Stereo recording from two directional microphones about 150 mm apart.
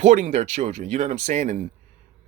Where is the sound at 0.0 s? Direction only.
50° right (ahead or behind).